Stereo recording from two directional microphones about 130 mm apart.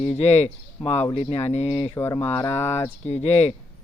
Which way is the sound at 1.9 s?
25° left (ahead or behind).